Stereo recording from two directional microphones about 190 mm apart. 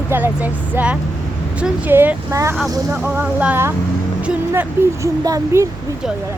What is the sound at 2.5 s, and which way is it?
Speech, 5° right (ahead or behind).